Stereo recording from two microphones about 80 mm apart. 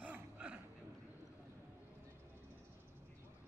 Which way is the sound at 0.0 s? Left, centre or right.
Centre.